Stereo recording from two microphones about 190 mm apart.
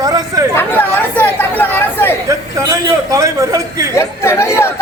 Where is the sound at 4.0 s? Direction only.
15° left (ahead or behind).